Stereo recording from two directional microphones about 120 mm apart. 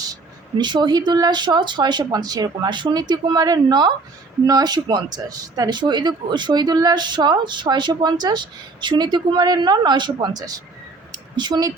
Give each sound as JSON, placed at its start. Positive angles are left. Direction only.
{"t": 0.6, "sound": "speech", "side_deg": -40}